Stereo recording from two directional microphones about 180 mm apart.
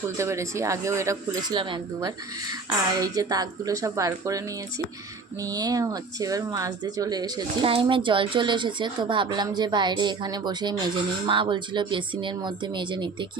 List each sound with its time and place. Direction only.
0.2 s a woman's voice: 15° right (ahead or behind)